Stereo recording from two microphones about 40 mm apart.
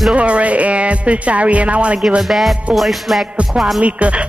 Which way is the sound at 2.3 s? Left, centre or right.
Centre.